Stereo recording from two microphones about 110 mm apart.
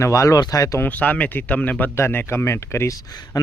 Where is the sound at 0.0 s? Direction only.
30° left (ahead or behind).